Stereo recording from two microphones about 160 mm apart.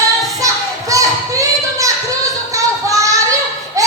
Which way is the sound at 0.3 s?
20° right (ahead or behind).